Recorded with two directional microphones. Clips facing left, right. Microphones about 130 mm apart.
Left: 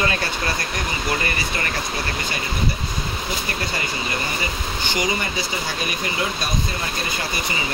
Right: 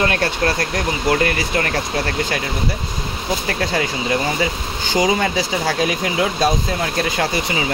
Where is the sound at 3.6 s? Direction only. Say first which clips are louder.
Right 6 dB; 90° right.